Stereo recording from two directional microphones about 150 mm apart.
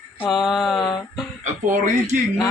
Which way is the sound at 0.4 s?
Centre (ahead or behind).